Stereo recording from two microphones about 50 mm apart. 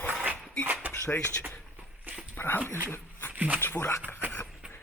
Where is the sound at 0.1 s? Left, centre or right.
Right.